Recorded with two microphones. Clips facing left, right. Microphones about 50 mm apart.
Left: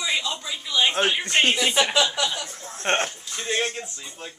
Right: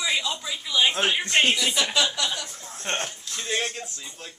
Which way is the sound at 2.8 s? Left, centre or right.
Left.